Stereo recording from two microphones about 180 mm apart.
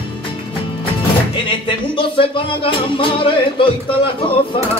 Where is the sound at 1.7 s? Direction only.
30° left (ahead or behind).